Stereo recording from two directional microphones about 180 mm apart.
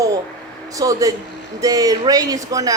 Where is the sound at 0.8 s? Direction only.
20° right (ahead or behind).